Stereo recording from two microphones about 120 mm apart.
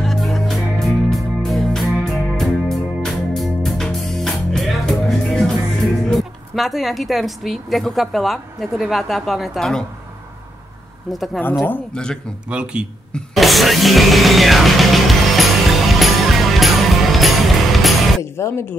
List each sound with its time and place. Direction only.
0.0 s music: centre (ahead or behind)
6.0 s a woman's voice: centre (ahead or behind)
11.1 s a woman's voice: centre (ahead or behind)
11.6 s speech: 10° left (ahead or behind)
12.4 s speech: 10° right (ahead or behind)
13.1 s music: centre (ahead or behind)
18.2 s speech: 20° left (ahead or behind)